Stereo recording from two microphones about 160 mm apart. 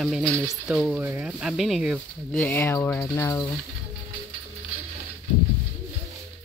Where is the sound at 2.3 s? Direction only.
10° left (ahead or behind).